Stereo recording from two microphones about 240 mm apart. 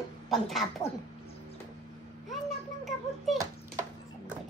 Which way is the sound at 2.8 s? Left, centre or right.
Centre.